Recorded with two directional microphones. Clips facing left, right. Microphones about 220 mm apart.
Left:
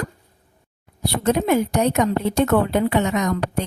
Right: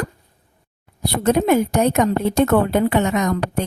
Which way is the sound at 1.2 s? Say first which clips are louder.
Right 3 dB; 50° right (ahead or behind).